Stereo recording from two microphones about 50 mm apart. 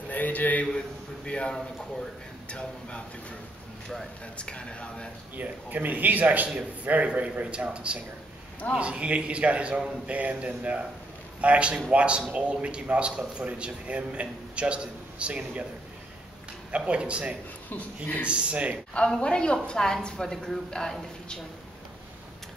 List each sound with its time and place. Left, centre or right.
0.1 s a man's voice: left
1.2 s speech: left
4.4 s speech: left
5.3 s a man's voice: right
16.7 s a man's voice: right
17.6 s a man's voice: left
18.2 s a man's voice: right
18.9 s a woman's voice: centre